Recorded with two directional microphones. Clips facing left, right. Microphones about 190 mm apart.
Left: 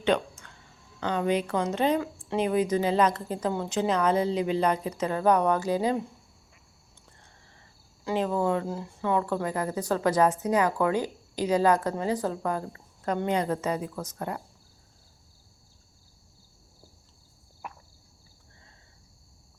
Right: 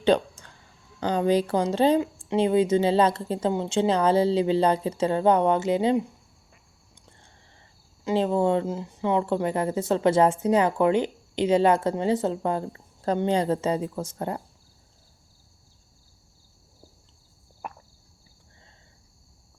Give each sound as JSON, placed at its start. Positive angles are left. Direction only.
{"t": 0.0, "sound": "a sound", "side_deg": -35}
{"t": 0.9, "sound": "speech", "side_deg": -35}
{"t": 8.0, "sound": "speech", "side_deg": -30}
{"t": 17.6, "sound": "cricket", "side_deg": -50}